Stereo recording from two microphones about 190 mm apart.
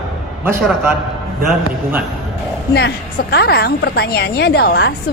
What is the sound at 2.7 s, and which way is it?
A woman's voice, 60° left (ahead or behind).